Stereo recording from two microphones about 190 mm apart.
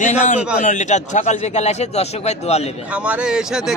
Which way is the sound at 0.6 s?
40° left (ahead or behind).